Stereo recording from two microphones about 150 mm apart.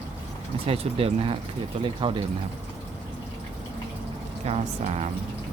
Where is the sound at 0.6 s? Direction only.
40° right (ahead or behind).